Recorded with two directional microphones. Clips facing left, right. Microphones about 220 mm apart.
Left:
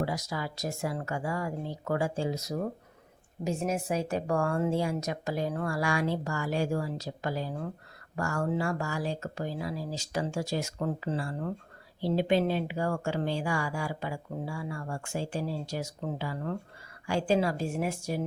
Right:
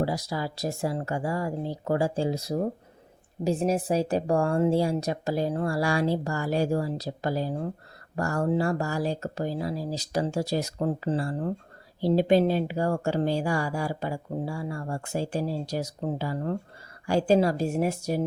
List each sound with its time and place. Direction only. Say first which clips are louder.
0.0 s speech: right 4 dB; 35° right (ahead or behind)